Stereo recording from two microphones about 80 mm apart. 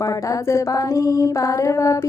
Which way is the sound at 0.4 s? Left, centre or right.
Left.